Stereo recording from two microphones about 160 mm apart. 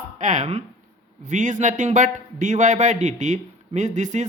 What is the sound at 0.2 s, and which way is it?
A man's voice, 50° right (ahead or behind).